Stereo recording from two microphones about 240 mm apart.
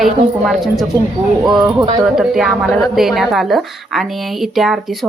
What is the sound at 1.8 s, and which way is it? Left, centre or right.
Speech, centre.